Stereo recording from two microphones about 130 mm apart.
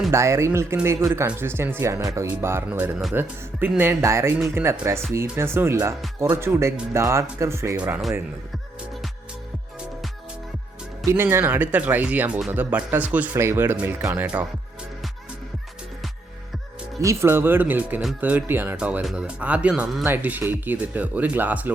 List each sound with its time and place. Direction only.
0.1 s speech: 20° right (ahead or behind)
11.0 s speech: 20° right (ahead or behind)
17.0 s speech: 20° right (ahead or behind)